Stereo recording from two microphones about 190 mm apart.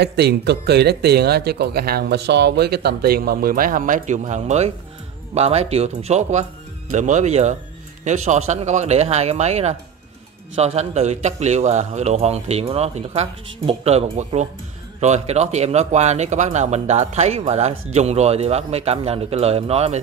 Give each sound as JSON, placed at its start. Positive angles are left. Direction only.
{"t": 0.0, "sound": "a man's voice", "side_deg": -60}